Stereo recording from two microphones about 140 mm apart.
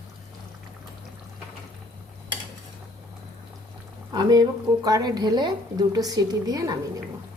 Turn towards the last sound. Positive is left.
turn(degrees=-25)  # may be behind; listen again after turning